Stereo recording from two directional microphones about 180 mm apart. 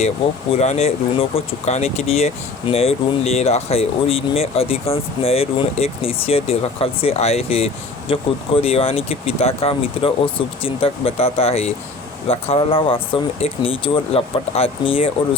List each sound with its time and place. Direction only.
0.5 s speech: 35° left (ahead or behind)